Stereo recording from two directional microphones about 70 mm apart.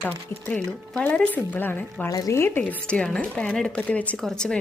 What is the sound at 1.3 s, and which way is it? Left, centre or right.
A woman's voice, left.